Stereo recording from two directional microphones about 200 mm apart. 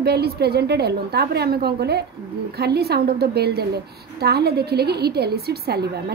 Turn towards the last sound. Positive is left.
turn(degrees=-50)  # may be behind; listen again after turning